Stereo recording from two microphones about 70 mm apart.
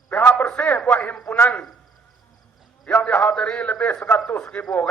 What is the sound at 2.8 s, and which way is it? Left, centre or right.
A man's voice, left.